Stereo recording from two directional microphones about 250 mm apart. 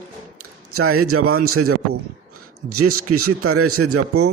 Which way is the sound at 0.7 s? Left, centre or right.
Right.